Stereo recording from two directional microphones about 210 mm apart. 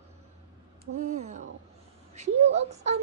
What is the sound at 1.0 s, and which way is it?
A woman's voice, 35° right (ahead or behind).